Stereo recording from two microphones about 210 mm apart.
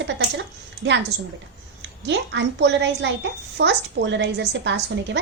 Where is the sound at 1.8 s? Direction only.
55° right (ahead or behind).